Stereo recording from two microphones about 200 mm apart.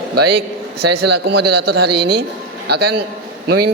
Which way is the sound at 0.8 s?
55° right (ahead or behind).